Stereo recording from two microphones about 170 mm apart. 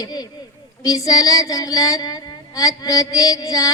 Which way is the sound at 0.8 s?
20° left (ahead or behind).